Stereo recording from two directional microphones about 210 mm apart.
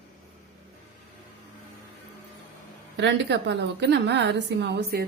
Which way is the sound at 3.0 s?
55° right (ahead or behind).